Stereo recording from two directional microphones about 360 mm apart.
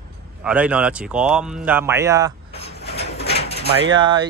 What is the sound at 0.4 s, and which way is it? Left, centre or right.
Speech, centre.